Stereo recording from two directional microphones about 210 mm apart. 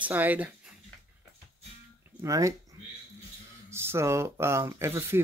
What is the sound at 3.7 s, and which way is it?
Speech, 10° right (ahead or behind).